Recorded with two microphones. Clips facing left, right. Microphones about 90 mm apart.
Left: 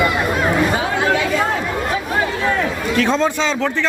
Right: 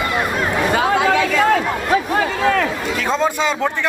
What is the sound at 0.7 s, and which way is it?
Chatter, 90° right.